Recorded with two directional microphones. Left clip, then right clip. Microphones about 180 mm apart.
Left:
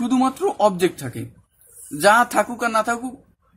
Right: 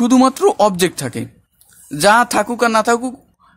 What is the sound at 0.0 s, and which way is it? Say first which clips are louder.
A man's voice: right 8 dB; 40° right (ahead or behind).